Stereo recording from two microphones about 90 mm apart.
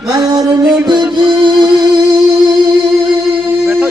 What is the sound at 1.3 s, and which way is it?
Music, 55° right (ahead or behind).